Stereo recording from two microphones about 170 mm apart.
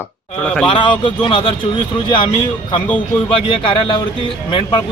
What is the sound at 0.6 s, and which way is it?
Speech, 30° left (ahead or behind).